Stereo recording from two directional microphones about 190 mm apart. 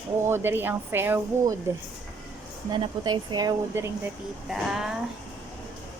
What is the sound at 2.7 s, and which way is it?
Speech, 25° right (ahead or behind).